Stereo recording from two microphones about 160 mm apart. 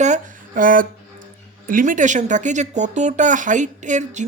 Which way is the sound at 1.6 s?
60° right (ahead or behind).